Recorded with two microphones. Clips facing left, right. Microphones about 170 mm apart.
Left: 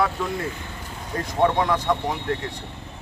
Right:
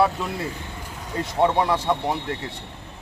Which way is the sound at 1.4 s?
10° right (ahead or behind).